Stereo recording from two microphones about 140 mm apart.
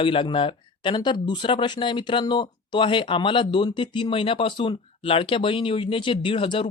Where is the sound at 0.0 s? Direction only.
40° left (ahead or behind).